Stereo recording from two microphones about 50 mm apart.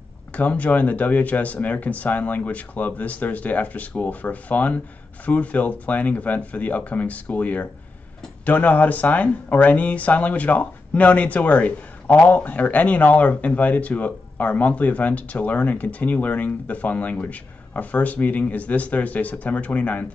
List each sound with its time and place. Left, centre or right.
0.3 s speech: left